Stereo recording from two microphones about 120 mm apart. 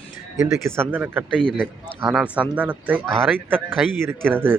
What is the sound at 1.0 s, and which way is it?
A man's voice, 10° right (ahead or behind).